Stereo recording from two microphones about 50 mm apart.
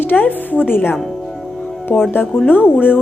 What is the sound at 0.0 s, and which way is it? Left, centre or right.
Speech, left.